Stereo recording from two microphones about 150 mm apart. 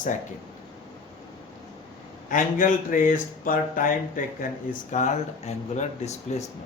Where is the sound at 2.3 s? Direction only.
60° left (ahead or behind).